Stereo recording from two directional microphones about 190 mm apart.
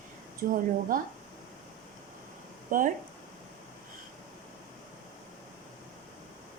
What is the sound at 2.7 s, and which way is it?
Speech, 45° right (ahead or behind).